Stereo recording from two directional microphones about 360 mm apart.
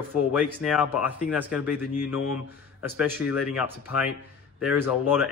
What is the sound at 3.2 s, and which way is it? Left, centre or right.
Speech, centre.